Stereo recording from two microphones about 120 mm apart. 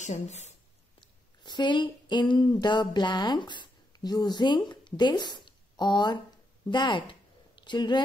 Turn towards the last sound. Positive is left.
turn(degrees=40)  # may be behind; listen again after turning